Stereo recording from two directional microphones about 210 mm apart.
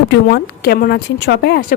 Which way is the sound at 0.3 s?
50° left (ahead or behind).